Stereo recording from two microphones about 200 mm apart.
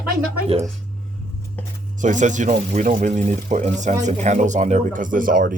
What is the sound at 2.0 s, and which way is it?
Speech, 40° right (ahead or behind).